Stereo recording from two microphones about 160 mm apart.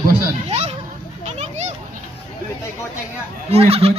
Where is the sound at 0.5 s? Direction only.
45° right (ahead or behind).